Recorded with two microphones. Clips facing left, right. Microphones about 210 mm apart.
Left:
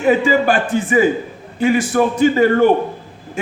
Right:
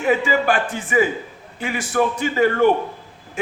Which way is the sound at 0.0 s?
35° left (ahead or behind).